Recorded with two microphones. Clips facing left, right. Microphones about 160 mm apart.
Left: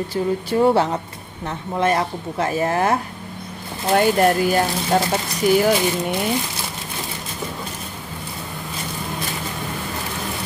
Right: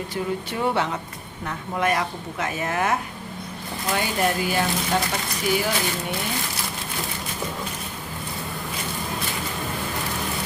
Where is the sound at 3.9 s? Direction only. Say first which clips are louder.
Left 8 dB; 55° left (ahead or behind).